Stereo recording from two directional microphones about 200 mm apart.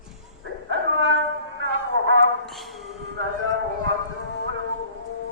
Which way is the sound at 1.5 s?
65° right (ahead or behind).